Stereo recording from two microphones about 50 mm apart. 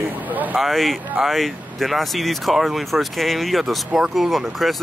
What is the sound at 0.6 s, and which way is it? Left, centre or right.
Speech, centre.